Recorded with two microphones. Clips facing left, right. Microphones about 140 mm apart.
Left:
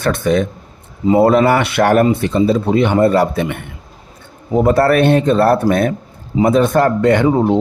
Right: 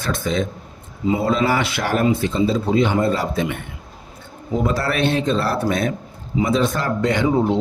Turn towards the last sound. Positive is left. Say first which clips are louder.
# left 6 dB
turn(degrees=55)  # may be behind; listen again after turning